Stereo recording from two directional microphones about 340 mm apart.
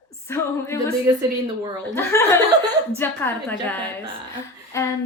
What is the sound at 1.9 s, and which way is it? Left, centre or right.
Speech, centre.